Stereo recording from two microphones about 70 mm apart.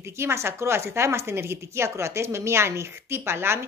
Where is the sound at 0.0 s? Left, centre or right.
Right.